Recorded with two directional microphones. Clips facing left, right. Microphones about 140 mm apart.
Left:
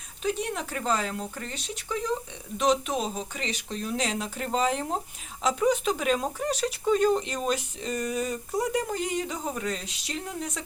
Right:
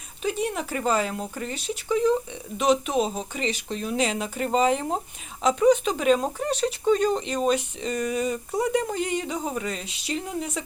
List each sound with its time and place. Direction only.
0.2 s speech: centre (ahead or behind)